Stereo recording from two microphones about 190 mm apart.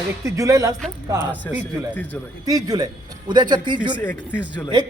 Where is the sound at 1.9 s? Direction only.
10° left (ahead or behind).